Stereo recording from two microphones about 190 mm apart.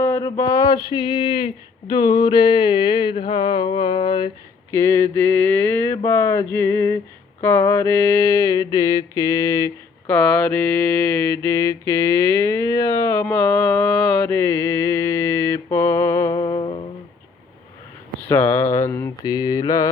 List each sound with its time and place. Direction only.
0.0 s mantra: 15° left (ahead or behind)
4.7 s a sound: 15° left (ahead or behind)
7.4 s mantra: 10° left (ahead or behind)
18.3 s speech: 10° left (ahead or behind)
18.7 s mantra: 15° left (ahead or behind)